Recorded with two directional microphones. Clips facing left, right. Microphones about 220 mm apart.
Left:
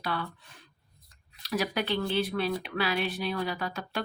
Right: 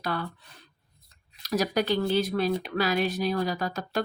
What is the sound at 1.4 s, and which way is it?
Speech, 40° right (ahead or behind).